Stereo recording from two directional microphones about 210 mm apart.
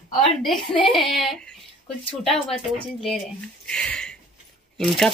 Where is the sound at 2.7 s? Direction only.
Centre (ahead or behind).